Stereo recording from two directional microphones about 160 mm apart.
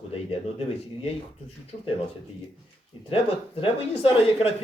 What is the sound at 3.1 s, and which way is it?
Speech, 35° left (ahead or behind).